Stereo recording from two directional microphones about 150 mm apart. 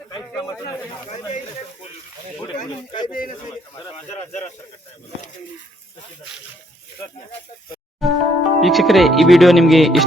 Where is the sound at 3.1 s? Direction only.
65° left (ahead or behind).